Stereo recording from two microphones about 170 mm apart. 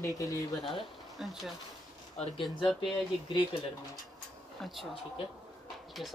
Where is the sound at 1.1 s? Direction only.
Centre (ahead or behind).